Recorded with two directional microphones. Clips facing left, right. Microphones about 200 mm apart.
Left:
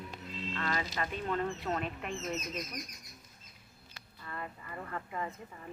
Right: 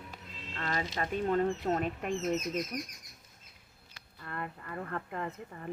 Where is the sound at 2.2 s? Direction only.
55° right (ahead or behind).